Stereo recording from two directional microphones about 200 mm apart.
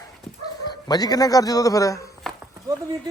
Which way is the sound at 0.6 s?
20° left (ahead or behind).